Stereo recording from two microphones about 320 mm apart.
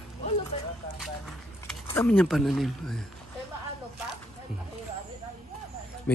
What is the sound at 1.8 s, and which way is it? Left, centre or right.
Speech, centre.